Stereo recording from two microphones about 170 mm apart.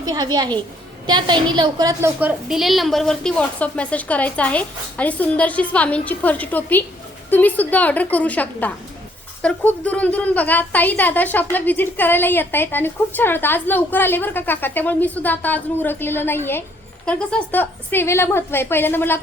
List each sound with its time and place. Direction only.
0.0 s a woman's voice: 25° right (ahead or behind)
2.2 s a woman's voice: centre (ahead or behind)